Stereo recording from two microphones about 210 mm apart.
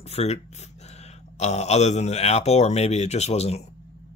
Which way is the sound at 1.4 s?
30° left (ahead or behind).